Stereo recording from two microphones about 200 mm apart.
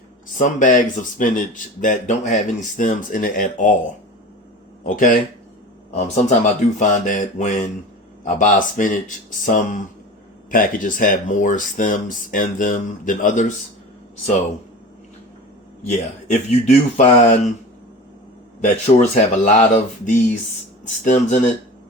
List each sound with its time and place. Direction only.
0.3 s speech: 40° left (ahead or behind)
4.8 s speech: 40° left (ahead or behind)
16.3 s speech: 35° left (ahead or behind)
18.6 s speech: 40° left (ahead or behind)